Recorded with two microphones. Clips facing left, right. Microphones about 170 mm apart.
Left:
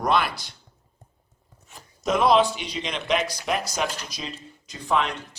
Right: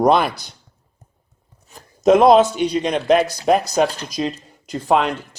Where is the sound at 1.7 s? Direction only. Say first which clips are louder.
Right 12 dB; 45° right (ahead or behind).